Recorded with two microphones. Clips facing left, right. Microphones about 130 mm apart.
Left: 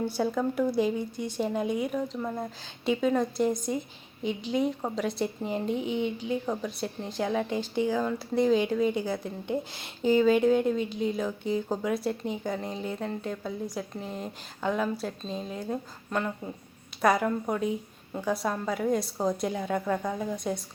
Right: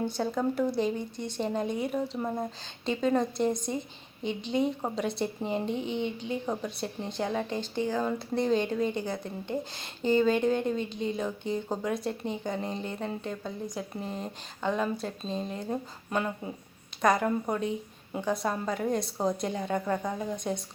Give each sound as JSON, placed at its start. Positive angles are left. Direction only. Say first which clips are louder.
{"t": 0.2, "sound": "a woman's voice", "louder": "left 2 dB", "side_deg": 0}
{"t": 2.1, "sound": "speech", "louder": "right 1 dB", "side_deg": -20}
{"t": 2.8, "sound": "a woman's voice", "louder": "left 1 dB", "side_deg": 5}